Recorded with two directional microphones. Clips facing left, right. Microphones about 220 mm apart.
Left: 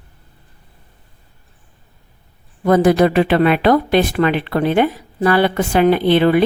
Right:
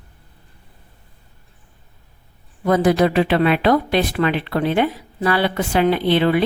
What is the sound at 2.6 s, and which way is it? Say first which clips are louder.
Speech: left 3 dB; 50° left (ahead or behind).